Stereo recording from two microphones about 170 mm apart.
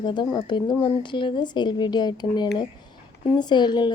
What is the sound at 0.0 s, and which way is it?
A woman's voice, 25° left (ahead or behind).